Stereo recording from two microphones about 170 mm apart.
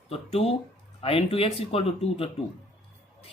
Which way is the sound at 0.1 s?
35° left (ahead or behind).